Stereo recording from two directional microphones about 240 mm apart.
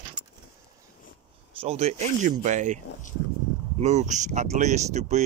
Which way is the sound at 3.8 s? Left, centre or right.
Right.